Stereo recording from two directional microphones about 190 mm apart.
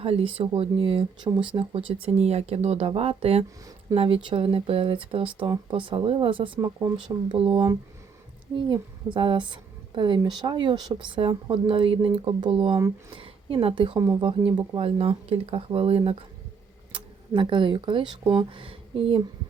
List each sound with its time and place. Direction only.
0.0 s a woman's voice: 30° right (ahead or behind)
7.3 s a woman's voice: 30° right (ahead or behind)